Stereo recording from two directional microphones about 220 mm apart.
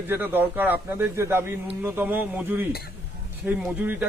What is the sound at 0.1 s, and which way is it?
A man's voice, 10° right (ahead or behind).